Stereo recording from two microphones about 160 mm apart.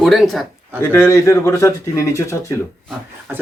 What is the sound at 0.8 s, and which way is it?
A man's voice, 20° left (ahead or behind).